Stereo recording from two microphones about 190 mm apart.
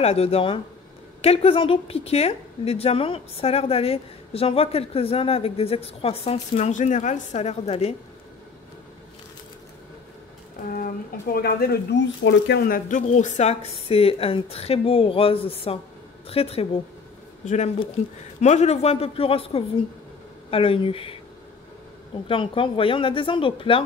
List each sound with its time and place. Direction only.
0.0 s a woman's voice: 30° left (ahead or behind)
10.7 s a woman's voice: 50° left (ahead or behind); by 21.2 s 30° left (ahead or behind)
22.3 s speech: 25° left (ahead or behind)